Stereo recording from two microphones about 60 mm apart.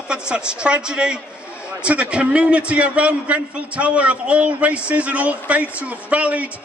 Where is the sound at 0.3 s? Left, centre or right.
Centre.